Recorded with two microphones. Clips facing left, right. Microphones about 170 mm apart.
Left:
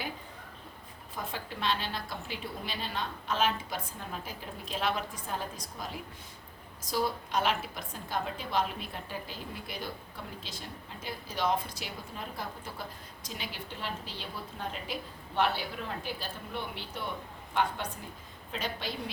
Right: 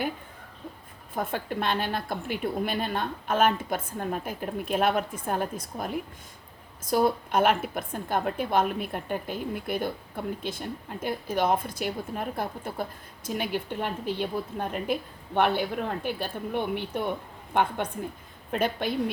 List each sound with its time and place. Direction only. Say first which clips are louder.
1.1 s a woman's voice: right 9 dB; 55° right (ahead or behind)